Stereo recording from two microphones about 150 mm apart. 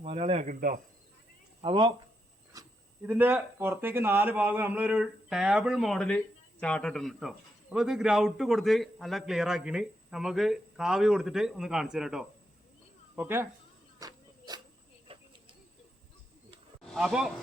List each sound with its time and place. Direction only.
0.0 s speech: 40° right (ahead or behind)
0.4 s speech: 70° right (ahead or behind)
1.6 s speech: 35° right (ahead or behind)
2.5 s a sound: 20° right (ahead or behind)
3.0 s a man's voice: 15° right (ahead or behind)
13.1 s speech: 15° right (ahead or behind)
14.0 s a sound: 25° right (ahead or behind)
15.1 s a sound: 35° right (ahead or behind)
16.8 s speech: centre (ahead or behind)